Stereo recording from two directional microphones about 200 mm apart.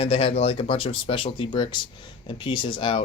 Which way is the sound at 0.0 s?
30° left (ahead or behind).